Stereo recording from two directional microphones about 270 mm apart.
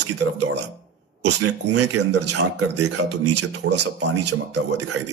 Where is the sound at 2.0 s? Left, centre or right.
Right.